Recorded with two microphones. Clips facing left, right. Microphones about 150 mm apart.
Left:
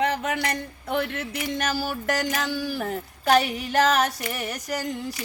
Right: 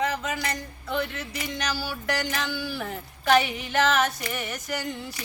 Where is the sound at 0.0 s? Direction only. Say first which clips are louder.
Left 3 dB; 65° left (ahead or behind).